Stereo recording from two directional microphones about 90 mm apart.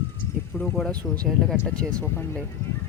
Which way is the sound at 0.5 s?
Centre (ahead or behind).